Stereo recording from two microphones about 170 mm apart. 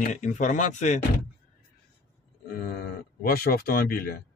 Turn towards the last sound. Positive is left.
turn(degrees=60)  # may be behind; listen again after turning